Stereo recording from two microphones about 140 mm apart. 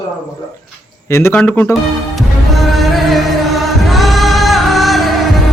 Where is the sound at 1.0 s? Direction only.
20° left (ahead or behind).